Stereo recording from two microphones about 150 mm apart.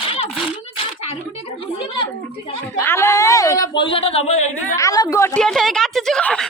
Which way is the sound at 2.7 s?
15° left (ahead or behind).